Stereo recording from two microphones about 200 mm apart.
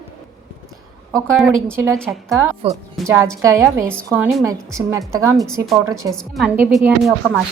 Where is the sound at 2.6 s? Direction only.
30° right (ahead or behind).